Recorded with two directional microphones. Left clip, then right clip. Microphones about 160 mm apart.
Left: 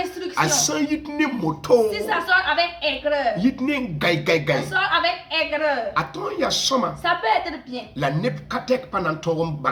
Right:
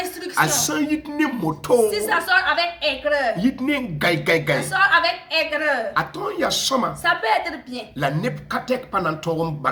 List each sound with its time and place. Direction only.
0.3 s speech: centre (ahead or behind)
1.9 s a woman's voice: 50° right (ahead or behind)
3.4 s speech: centre (ahead or behind)
4.7 s a woman's voice: 50° right (ahead or behind)
5.9 s speech: 10° right (ahead or behind)
7.0 s a woman's voice: 50° right (ahead or behind)
7.9 s speech: 5° right (ahead or behind)